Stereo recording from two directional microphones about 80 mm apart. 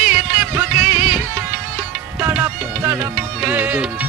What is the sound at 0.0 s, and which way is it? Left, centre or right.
Music, right.